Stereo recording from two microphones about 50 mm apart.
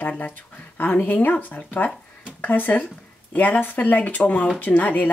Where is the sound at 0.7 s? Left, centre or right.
Left.